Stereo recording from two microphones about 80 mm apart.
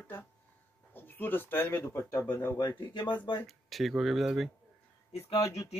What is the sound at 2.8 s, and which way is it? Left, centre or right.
Speech, left.